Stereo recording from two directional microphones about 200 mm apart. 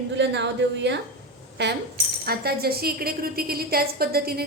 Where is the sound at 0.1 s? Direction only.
60° right (ahead or behind).